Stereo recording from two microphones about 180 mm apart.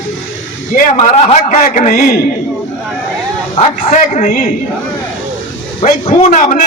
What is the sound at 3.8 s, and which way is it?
Speech, 45° left (ahead or behind).